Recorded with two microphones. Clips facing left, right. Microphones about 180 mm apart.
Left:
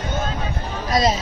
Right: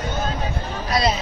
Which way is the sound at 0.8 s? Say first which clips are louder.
Left 2 dB; 40° left (ahead or behind).